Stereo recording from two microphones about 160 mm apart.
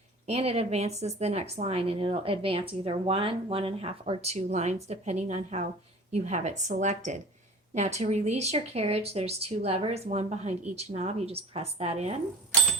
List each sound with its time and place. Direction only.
0.3 s speech: 40° right (ahead or behind)